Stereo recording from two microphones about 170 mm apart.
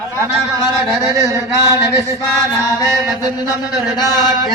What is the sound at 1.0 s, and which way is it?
Speech, 15° right (ahead or behind).